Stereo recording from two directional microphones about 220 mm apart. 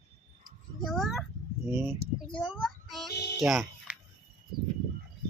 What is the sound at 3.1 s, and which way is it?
Music, 50° left (ahead or behind).